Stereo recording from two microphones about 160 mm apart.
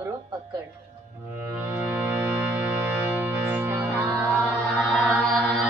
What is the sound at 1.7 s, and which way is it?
Music, 10° right (ahead or behind).